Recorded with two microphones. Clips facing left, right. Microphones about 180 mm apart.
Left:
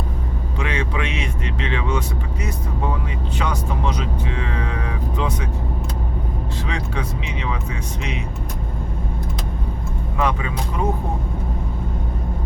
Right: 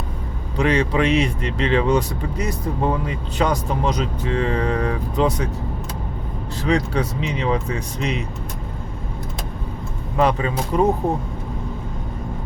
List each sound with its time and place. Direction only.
0.5 s speech: 35° right (ahead or behind)
6.6 s speech: 40° right (ahead or behind)
10.2 s speech: 35° right (ahead or behind)